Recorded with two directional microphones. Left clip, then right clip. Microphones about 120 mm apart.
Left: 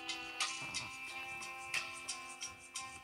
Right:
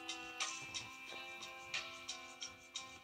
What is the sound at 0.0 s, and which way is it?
Music, 40° right (ahead or behind).